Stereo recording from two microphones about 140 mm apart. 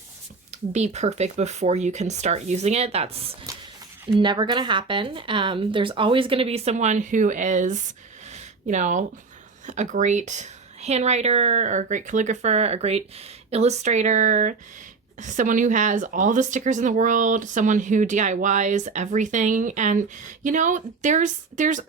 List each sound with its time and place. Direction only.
0.5 s speech: 55° right (ahead or behind)
4.1 s speech: 35° right (ahead or behind); by 21.8 s 65° right (ahead or behind)